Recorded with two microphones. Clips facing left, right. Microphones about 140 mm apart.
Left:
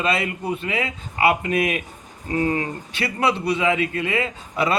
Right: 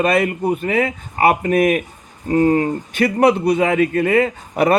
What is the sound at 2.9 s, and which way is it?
Speech, 45° right (ahead or behind).